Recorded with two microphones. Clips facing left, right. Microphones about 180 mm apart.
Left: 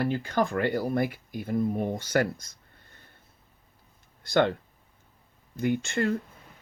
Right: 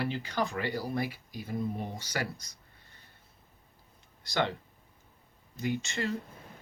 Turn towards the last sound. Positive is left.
turn(degrees=55)  # may be behind; listen again after turning